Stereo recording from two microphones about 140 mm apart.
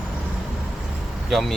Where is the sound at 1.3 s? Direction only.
Centre (ahead or behind).